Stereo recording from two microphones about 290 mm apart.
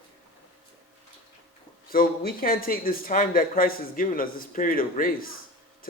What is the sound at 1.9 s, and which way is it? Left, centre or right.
A man's voice, left.